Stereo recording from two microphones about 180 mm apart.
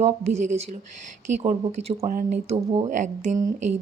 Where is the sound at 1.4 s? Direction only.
35° right (ahead or behind).